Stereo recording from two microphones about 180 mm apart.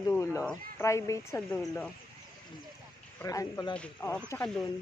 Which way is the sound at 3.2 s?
20° left (ahead or behind).